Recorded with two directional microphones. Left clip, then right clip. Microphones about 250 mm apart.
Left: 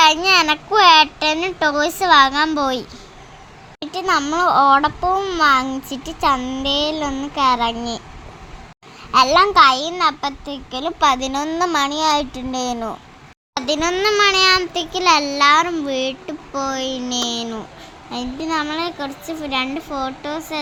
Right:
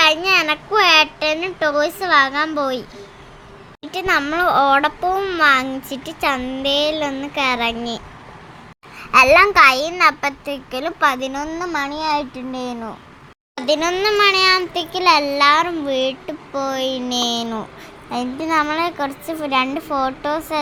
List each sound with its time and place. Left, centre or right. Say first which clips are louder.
0.0 s a child's voice: left 2 dB; centre
3.9 s a child's voice: even; centre
9.1 s a child's voice: right 2 dB; centre
11.6 s speech: left 6 dB; left
13.6 s a child's voice: right 1 dB; centre